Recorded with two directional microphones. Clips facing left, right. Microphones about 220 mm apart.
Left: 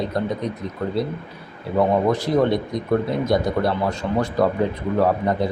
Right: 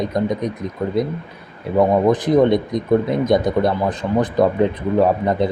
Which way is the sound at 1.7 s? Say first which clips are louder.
Right 4 dB; 20° right (ahead or behind).